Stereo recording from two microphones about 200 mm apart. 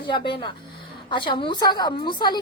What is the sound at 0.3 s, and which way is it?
A woman's voice, 25° left (ahead or behind).